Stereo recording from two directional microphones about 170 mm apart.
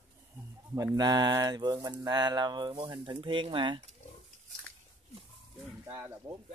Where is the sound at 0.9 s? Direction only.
25° right (ahead or behind).